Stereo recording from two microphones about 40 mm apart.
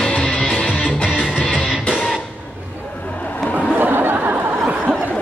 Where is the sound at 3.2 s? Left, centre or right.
Left.